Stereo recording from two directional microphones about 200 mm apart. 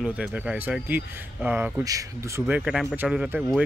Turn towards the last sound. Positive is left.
turn(degrees=-5)  # may be behind; listen again after turning